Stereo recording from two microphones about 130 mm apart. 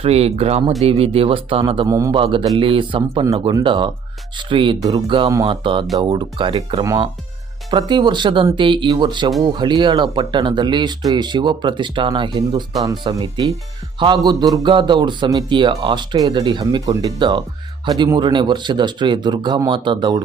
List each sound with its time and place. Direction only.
0.0 s speech: 50° right (ahead or behind)
1.9 s a man's voice: 25° right (ahead or behind)
2.1 s speech: 45° right (ahead or behind)